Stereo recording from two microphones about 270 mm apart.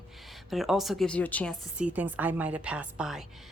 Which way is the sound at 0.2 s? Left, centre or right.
Centre.